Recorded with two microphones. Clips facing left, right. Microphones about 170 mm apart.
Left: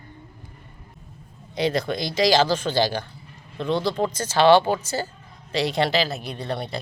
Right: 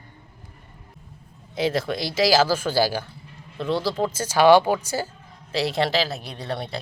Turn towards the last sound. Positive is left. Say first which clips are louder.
# left 1 dB
turn(degrees=0)  # may be behind; listen again after turning